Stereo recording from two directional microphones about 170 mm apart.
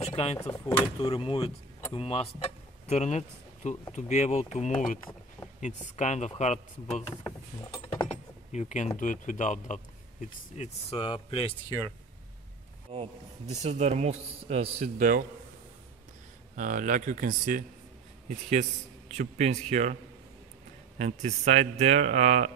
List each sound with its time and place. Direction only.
0.0 s a sound: 35° left (ahead or behind)
0.4 s speech: 15° left (ahead or behind)
1.1 s speech: 35° left (ahead or behind)
7.1 s mechanisms: 20° left (ahead or behind)
8.5 s speech: 45° left (ahead or behind)
12.9 s speech: 40° right (ahead or behind)
16.5 s a man's voice: 50° right (ahead or behind)
21.0 s speech: 40° right (ahead or behind)